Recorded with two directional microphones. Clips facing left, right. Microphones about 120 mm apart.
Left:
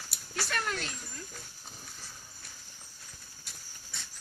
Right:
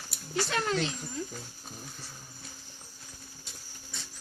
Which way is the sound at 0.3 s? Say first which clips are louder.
Right 5 dB; 15° right (ahead or behind).